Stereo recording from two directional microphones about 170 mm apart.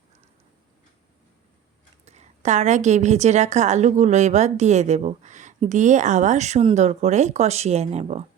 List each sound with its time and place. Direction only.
2.0 s a woman's voice: 40° right (ahead or behind)